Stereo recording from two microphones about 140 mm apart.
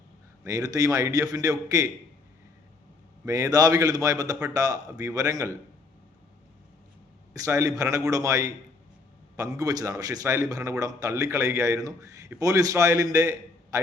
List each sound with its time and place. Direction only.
0.4 s a man's voice: 25° right (ahead or behind)
3.2 s a man's voice: 25° right (ahead or behind)
7.3 s a man's voice: 25° right (ahead or behind)